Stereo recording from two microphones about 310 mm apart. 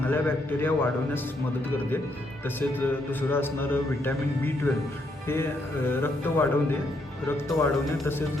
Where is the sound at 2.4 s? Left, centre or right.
Centre.